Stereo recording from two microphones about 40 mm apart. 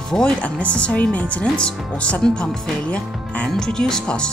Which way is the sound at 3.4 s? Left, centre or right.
Centre.